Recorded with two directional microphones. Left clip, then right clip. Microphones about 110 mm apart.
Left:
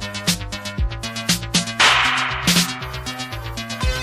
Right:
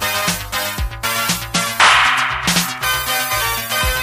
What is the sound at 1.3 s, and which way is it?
Music, 40° left (ahead or behind).